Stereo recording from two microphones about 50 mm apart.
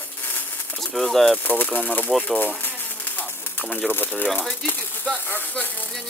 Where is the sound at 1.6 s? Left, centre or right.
Left.